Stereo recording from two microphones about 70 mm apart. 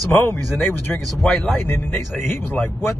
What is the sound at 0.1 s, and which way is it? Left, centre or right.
Speech, left.